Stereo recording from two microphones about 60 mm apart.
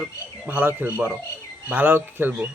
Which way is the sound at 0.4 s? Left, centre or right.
Right.